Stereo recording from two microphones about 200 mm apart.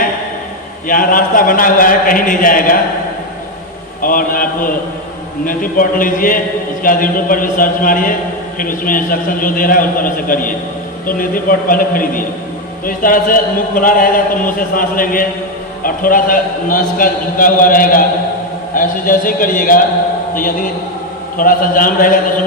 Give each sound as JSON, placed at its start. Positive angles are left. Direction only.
{"t": 0.9, "sound": "a man's voice", "side_deg": 45}
{"t": 4.0, "sound": "a man's voice", "side_deg": 45}